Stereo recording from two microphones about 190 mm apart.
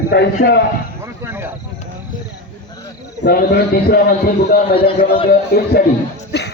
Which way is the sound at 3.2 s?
60° left (ahead or behind).